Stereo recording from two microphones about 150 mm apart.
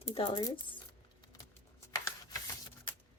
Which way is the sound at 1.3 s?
20° left (ahead or behind).